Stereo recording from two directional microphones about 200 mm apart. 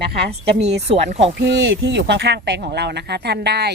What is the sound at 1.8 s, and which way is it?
Speech, 60° right (ahead or behind).